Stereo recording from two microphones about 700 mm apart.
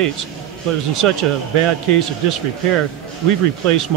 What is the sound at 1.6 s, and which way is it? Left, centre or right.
Speech, right.